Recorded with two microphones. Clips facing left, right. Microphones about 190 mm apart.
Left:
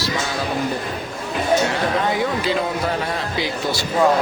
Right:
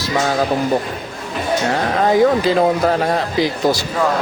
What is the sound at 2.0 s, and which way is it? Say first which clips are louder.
A man's voice: right 7 dB; 40° right (ahead or behind).